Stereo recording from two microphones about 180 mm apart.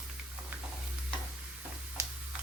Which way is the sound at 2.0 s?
15° right (ahead or behind).